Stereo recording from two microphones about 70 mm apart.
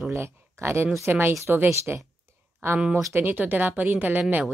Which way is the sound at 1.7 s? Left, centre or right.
Right.